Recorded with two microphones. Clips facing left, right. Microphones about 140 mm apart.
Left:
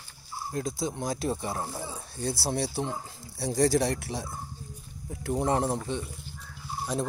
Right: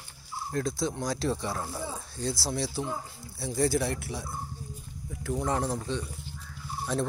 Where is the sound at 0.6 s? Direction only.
15° left (ahead or behind).